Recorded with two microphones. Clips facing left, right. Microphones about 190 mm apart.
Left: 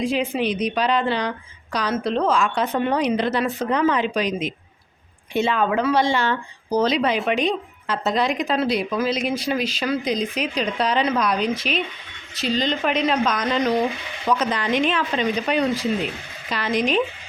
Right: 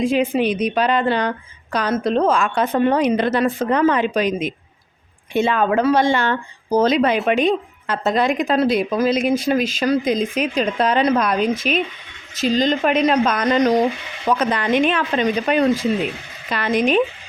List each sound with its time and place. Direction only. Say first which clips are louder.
0.0 s speech: right 4 dB; 50° right (ahead or behind)
14.3 s speech: right 3 dB; 55° right (ahead or behind)